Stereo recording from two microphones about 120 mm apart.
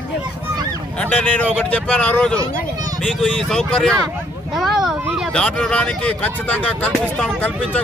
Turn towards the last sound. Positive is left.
turn(degrees=10)  # may be behind; listen again after turning